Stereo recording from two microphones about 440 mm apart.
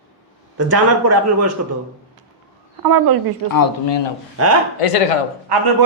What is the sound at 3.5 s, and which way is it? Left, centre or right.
Speech, left.